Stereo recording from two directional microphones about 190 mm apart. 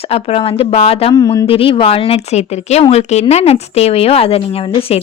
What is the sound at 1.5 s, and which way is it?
A woman's voice, 30° left (ahead or behind).